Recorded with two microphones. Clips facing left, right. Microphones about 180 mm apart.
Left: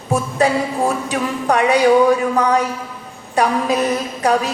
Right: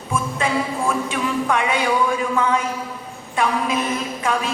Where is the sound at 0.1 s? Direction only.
40° left (ahead or behind).